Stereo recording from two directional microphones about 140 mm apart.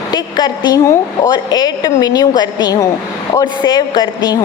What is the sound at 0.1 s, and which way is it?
A woman's voice, 30° left (ahead or behind).